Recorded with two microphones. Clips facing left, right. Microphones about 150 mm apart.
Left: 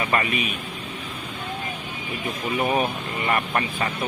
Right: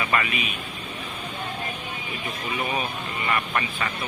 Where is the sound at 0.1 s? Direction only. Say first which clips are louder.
Left 1 dB; 30° left (ahead or behind).